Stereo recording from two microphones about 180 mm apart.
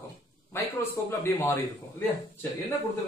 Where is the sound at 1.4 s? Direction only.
15° left (ahead or behind).